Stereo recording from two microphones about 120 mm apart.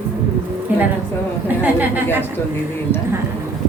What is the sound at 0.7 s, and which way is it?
A woman's voice, 15° right (ahead or behind).